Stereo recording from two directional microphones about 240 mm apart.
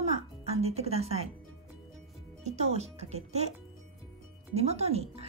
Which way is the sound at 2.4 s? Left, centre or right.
Right.